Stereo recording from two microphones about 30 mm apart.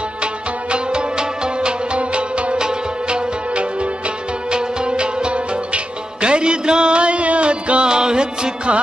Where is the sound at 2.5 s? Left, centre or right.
Right.